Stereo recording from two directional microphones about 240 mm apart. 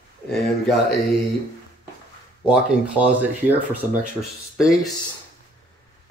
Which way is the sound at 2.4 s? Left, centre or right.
Centre.